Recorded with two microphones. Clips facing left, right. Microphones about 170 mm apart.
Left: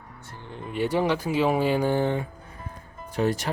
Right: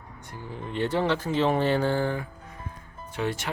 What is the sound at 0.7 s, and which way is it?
Speech, 10° left (ahead or behind).